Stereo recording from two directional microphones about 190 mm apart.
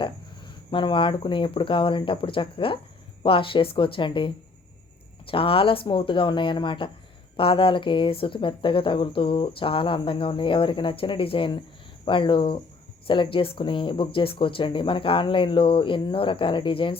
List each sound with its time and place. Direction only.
0.0 s speech: 25° left (ahead or behind)